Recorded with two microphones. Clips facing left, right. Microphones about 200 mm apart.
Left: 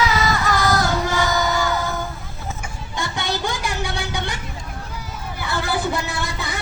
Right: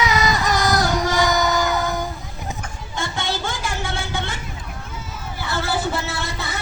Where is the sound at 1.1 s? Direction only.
15° right (ahead or behind).